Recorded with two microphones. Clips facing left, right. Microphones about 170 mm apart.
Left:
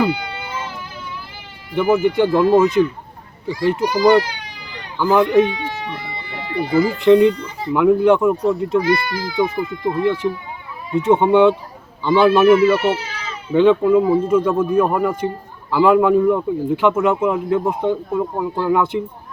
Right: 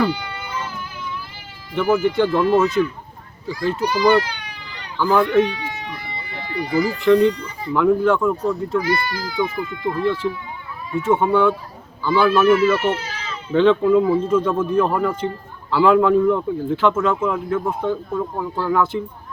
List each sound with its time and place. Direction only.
1.7 s speech: 15° left (ahead or behind)
5.7 s baby cry: 35° left (ahead or behind)
6.5 s speech: 25° left (ahead or behind)